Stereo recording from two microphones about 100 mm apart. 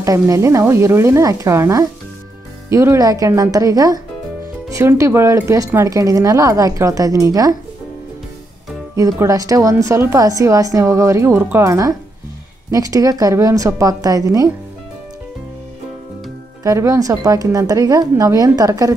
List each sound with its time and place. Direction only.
0.0 s a woman's voice: 30° right (ahead or behind)
8.9 s a woman's voice: 35° right (ahead or behind)
16.6 s a woman's voice: 30° right (ahead or behind)